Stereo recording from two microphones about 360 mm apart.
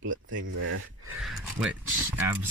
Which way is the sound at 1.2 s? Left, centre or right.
Centre.